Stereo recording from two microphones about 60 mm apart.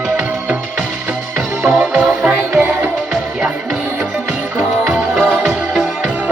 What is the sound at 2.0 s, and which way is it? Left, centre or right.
Music, right.